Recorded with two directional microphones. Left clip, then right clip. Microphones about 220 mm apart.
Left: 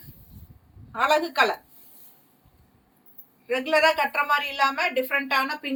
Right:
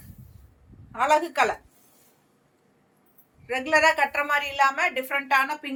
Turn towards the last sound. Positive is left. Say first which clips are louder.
# right 1 dB
turn(degrees=-15)  # may be behind; listen again after turning